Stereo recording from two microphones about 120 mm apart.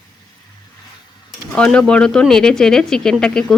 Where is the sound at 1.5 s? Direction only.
5° left (ahead or behind).